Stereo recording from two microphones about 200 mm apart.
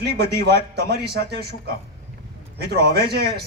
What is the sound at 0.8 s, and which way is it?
A man's voice, 55° right (ahead or behind).